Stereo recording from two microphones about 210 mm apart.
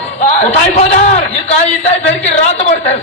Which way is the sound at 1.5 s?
30° left (ahead or behind).